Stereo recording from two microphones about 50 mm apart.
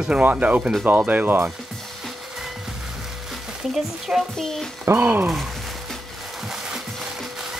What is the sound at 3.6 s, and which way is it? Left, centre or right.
Speech, centre.